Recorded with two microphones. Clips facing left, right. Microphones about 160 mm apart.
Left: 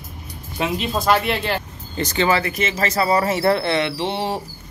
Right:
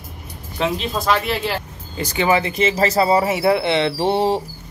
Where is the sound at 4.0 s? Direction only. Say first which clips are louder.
Right 6 dB; 45° right (ahead or behind).